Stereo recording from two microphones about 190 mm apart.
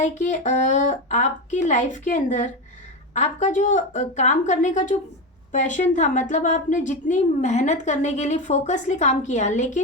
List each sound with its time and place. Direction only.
0.0 s a woman's voice: 40° left (ahead or behind)